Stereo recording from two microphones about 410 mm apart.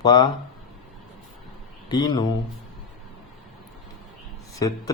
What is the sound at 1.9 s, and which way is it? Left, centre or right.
Speech, centre.